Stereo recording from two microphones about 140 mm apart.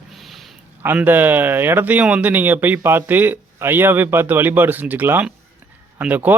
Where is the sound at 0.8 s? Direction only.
15° right (ahead or behind).